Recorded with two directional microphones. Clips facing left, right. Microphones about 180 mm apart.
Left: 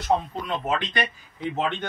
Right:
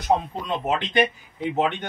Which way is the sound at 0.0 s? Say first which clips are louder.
Right 1 dB; 20° right (ahead or behind).